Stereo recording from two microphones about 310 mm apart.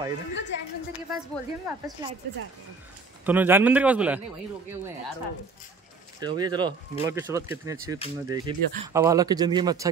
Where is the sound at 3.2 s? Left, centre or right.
Centre.